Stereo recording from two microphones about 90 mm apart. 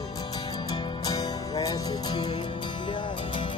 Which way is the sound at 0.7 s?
50° left (ahead or behind).